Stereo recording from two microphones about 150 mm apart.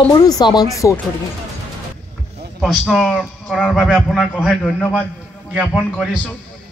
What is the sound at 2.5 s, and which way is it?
A man's voice, 5° right (ahead or behind).